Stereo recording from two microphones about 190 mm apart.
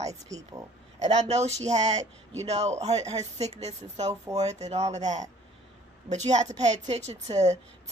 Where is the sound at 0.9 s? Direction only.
35° right (ahead or behind).